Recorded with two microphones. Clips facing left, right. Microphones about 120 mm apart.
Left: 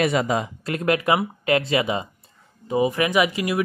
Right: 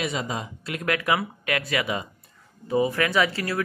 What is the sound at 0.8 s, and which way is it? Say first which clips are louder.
Speech: left 4 dB; 25° left (ahead or behind).